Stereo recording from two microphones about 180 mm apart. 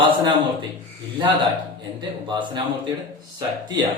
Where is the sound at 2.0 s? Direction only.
25° right (ahead or behind).